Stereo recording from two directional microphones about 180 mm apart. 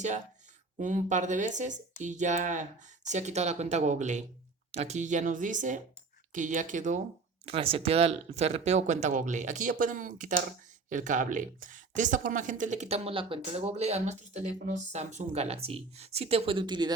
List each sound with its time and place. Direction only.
0.8 s speech: 45° right (ahead or behind)
7.4 s speech: 30° right (ahead or behind)